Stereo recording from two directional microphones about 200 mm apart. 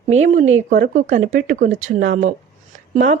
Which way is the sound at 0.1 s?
35° right (ahead or behind).